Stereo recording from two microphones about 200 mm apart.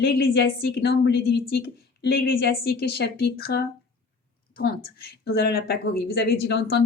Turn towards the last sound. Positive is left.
turn(degrees=50)  # may be behind; listen again after turning